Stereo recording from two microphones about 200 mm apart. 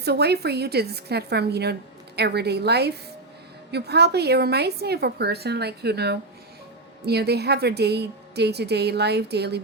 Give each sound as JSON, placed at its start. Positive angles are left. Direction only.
{"t": 0.0, "sound": "a woman's voice", "side_deg": -55}